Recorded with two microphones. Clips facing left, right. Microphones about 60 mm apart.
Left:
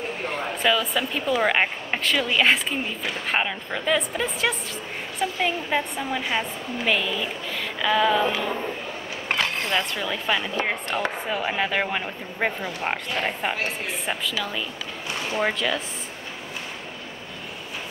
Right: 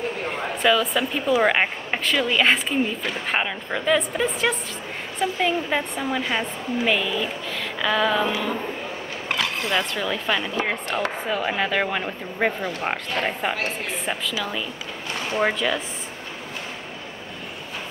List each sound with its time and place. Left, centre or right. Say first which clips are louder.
0.6 s speech: right 3 dB; centre
9.3 s a sound: left 1 dB; left
9.8 s speech: right 2 dB; centre